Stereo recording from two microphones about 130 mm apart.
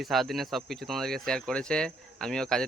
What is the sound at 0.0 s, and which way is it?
Speech, centre (ahead or behind).